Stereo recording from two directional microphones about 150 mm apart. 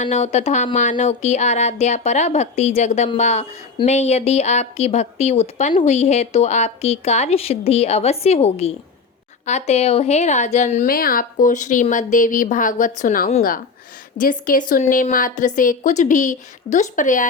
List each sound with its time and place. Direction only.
0.0 s speech: 50° left (ahead or behind)
10.8 s a woman's voice: 70° left (ahead or behind)